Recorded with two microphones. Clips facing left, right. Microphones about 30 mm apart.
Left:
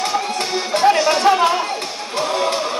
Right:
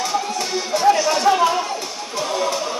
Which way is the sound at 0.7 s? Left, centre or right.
Left.